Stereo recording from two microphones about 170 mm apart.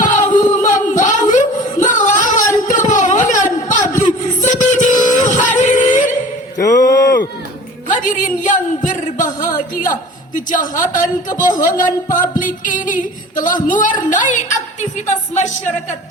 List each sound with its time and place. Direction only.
0.0 s music: 50° left (ahead or behind)
0.5 s singing: 50° left (ahead or behind)
1.8 s music: 50° left (ahead or behind)
2.6 s a sound: 50° left (ahead or behind)
4.0 s music: 45° left (ahead or behind)
6.6 s a sound: 20° left (ahead or behind)
7.9 s a man's voice: 50° left (ahead or behind)